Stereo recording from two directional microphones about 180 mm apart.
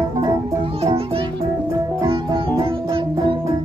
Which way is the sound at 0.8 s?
35° right (ahead or behind).